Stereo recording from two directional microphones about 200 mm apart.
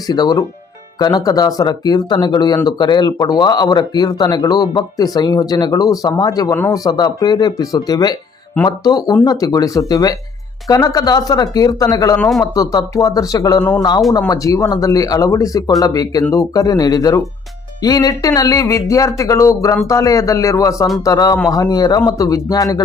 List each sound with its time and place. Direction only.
0.1 s speech: 20° left (ahead or behind)